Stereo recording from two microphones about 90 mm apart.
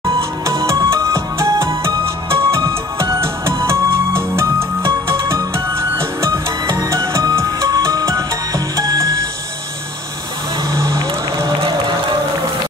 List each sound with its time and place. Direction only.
0.5 s music: 35° right (ahead or behind)
10.7 s music: 35° right (ahead or behind)
11.3 s crowd: 55° right (ahead or behind)